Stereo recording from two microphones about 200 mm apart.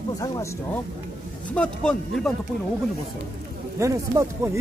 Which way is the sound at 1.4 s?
5° left (ahead or behind).